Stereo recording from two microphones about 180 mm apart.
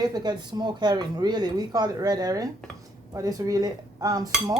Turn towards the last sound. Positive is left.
turn(degrees=-20)  # may be behind; listen again after turning